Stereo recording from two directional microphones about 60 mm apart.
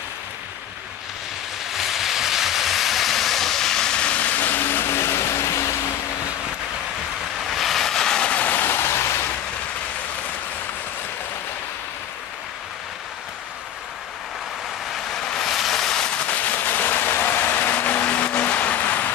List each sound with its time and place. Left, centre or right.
1.7 s train: centre; by 5.6 s left
7.5 s vehicle: centre; by 9.0 s left
15.1 s vehicle: centre
16.4 s vehicle: left